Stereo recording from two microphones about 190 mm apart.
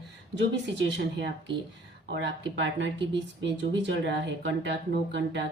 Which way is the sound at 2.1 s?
70° right (ahead or behind).